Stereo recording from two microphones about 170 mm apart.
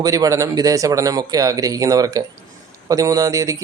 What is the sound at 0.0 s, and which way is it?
A man's voice, 20° right (ahead or behind).